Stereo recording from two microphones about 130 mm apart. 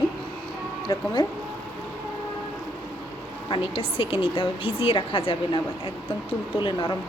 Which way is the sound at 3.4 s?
45° left (ahead or behind).